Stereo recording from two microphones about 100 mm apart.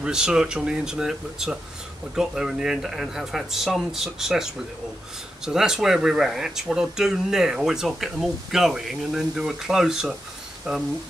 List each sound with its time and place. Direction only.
0.0 s speech: 5° right (ahead or behind)